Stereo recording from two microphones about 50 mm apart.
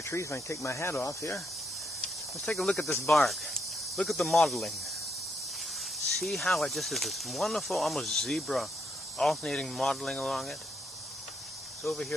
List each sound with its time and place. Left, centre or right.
0.0 s speech: left
2.0 s snake: centre
3.1 s cricket: centre
4.1 s speech: centre
6.1 s speech: centre
9.4 s speech: centre
9.7 s speech: centre
11.8 s speech: centre